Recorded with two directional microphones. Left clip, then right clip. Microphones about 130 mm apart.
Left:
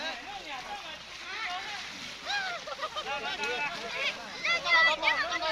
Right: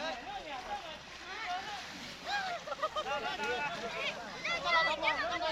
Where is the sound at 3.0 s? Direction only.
5° right (ahead or behind).